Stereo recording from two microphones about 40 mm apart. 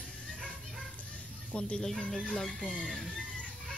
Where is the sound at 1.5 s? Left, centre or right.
Left.